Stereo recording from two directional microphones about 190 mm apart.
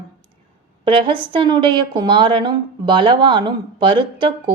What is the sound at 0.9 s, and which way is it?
A woman's voice, 25° right (ahead or behind).